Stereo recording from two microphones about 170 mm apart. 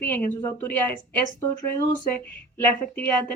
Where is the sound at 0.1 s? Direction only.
10° left (ahead or behind).